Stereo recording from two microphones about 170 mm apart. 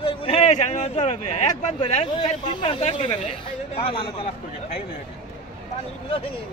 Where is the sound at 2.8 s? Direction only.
40° left (ahead or behind).